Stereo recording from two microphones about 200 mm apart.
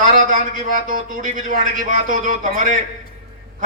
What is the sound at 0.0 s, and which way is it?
A man's voice, 40° right (ahead or behind).